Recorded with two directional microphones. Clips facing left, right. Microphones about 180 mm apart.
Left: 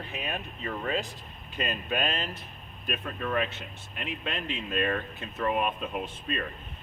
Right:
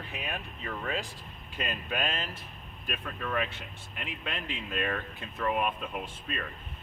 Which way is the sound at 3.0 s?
10° left (ahead or behind).